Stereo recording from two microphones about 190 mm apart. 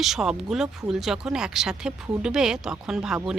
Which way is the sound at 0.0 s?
Centre (ahead or behind).